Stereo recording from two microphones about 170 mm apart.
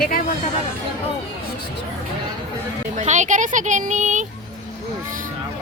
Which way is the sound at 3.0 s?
45° right (ahead or behind).